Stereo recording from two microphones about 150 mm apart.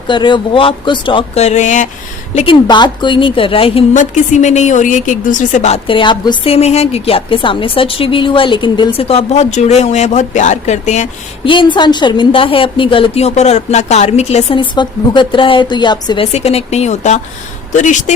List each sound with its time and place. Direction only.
0.1 s a woman's voice: 30° left (ahead or behind)
1.4 s a woman's voice: 50° left (ahead or behind)
2.3 s a woman's voice: 40° left (ahead or behind)
2.6 s a woman's voice: 30° left (ahead or behind)
3.9 s a woman's voice: 50° left (ahead or behind)
11.4 s a woman's voice: 30° left (ahead or behind); by 18.1 s 55° left (ahead or behind)